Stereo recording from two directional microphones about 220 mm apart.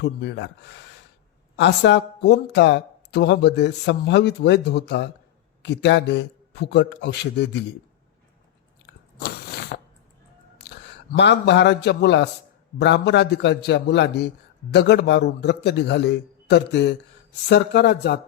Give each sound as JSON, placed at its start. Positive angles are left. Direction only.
{"t": 0.0, "sound": "speech", "side_deg": 50}
{"t": 9.1, "sound": "biting", "side_deg": 45}
{"t": 11.2, "sound": "speech", "side_deg": 50}